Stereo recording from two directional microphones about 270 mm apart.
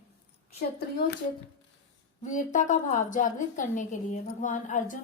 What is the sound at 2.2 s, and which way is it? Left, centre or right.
A woman's voice, left.